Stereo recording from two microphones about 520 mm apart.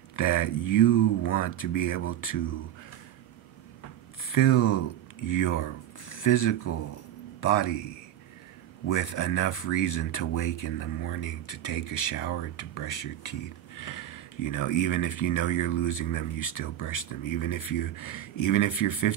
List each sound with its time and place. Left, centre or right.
0.1 s speech: left
4.3 s speech: left
8.8 s speech: left